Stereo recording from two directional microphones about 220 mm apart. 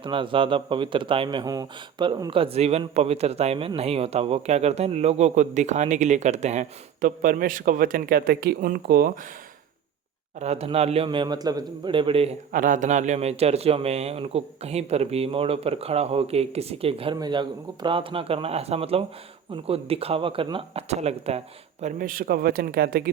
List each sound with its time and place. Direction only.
0.0 s speech: 20° right (ahead or behind); by 9.1 s 45° right (ahead or behind)
10.4 s speech: 30° right (ahead or behind)
12.5 s speech: 40° right (ahead or behind)